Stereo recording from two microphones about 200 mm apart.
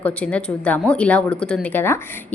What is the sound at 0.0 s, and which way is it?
A woman's voice, 5° left (ahead or behind).